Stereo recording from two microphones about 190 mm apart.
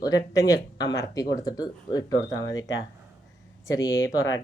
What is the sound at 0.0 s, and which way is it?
Speech, 20° left (ahead or behind).